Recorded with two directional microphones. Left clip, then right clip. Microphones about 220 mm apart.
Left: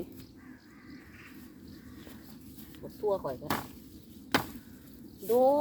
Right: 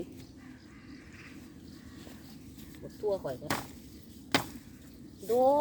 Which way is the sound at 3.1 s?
25° left (ahead or behind).